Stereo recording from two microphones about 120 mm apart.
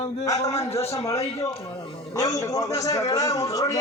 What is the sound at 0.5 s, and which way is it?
A man's voice, 25° left (ahead or behind).